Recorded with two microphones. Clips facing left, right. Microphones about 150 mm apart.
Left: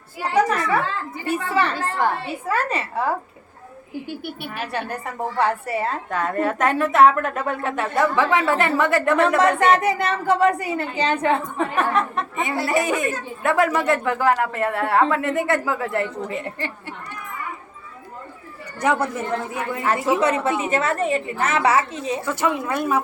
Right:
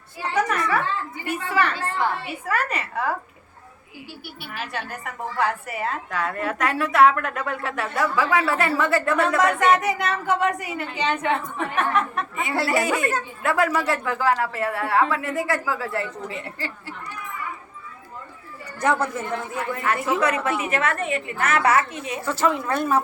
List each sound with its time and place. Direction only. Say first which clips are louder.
0.2 s a sound: left 4 dB; 30° left (ahead or behind)
1.2 s a woman's voice: left 3 dB; 30° left (ahead or behind)
1.7 s a woman's voice: left 2 dB; 45° left (ahead or behind)
2.2 s a woman's voice: left 2 dB; 30° left (ahead or behind)
4.7 s a woman's voice: left 4 dB; 30° left (ahead or behind)
6.5 s a woman's voice: left 3 dB; 25° left (ahead or behind)
18.8 s a man's voice: left 1 dB; 15° left (ahead or behind)
22.3 s a man's voice: right 2 dB; 15° left (ahead or behind)